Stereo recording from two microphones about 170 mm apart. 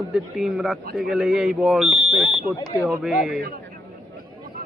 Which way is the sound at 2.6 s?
20° left (ahead or behind).